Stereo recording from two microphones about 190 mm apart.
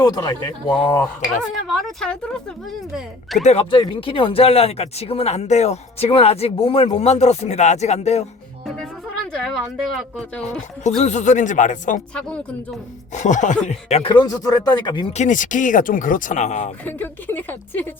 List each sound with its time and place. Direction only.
0.0 s speech: 20° left (ahead or behind)
1.6 s speech: centre (ahead or behind)
3.4 s speech: 30° left (ahead or behind)
9.3 s speech: 5° left (ahead or behind)
11.0 s speech: 40° left (ahead or behind)
13.1 s speech: 40° left (ahead or behind); by 15.1 s 25° left (ahead or behind)
15.1 s speech: 40° left (ahead or behind)
16.8 s a woman's voice: 10° left (ahead or behind)